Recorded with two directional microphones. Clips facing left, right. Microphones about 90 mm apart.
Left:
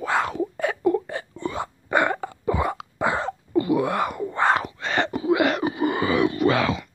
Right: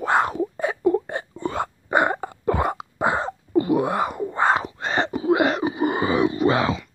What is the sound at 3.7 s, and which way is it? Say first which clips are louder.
Wail: even; 35° right (ahead or behind).